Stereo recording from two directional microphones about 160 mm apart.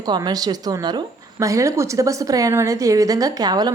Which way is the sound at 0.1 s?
25° right (ahead or behind).